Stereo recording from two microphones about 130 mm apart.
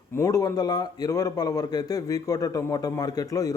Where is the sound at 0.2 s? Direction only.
25° left (ahead or behind).